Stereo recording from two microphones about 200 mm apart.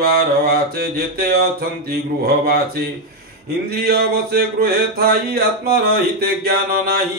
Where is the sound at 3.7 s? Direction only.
50° right (ahead or behind).